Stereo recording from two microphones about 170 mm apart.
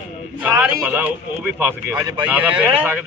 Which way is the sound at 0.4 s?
5° right (ahead or behind).